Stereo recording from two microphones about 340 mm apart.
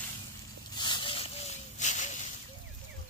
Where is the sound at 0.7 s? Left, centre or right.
Centre.